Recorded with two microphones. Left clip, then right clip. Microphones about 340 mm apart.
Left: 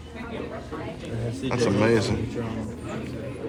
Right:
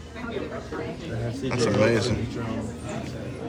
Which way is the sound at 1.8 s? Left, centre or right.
Centre.